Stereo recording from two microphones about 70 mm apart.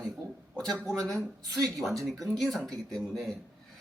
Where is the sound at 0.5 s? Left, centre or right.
Centre.